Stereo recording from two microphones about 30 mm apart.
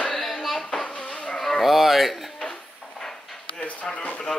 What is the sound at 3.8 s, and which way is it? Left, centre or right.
Speech, left.